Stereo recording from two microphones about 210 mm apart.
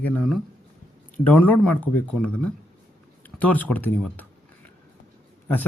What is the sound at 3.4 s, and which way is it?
Speech, 5° left (ahead or behind).